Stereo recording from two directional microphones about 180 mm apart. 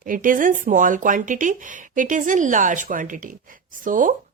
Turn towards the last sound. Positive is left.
turn(degrees=-45)  # may be behind; listen again after turning